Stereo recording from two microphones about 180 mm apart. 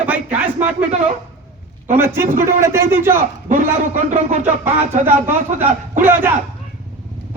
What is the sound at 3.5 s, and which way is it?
A man's voice, 45° right (ahead or behind).